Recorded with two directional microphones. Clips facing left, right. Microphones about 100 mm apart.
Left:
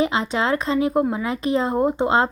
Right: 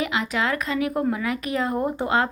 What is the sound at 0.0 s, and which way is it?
Speech, 30° left (ahead or behind).